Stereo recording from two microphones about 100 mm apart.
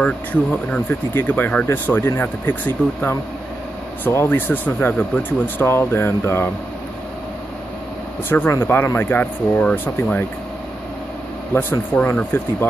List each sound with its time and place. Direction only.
0.0 s speech: 15° left (ahead or behind)
1.7 s speech: 25° left (ahead or behind)
8.3 s speech: 25° left (ahead or behind)
11.5 s speech: 20° left (ahead or behind)